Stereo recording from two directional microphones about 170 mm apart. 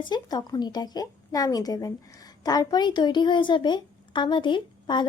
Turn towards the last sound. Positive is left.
turn(degrees=25)  # may be behind; listen again after turning